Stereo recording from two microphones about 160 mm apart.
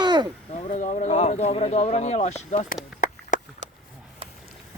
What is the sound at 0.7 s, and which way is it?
Speech, 50° left (ahead or behind).